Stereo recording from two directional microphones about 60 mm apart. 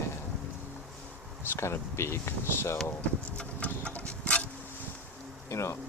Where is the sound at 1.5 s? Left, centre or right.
Left.